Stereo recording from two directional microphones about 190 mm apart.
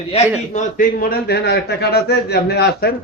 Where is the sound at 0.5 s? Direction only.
50° left (ahead or behind).